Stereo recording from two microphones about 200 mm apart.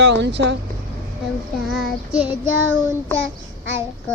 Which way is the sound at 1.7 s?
Centre (ahead or behind).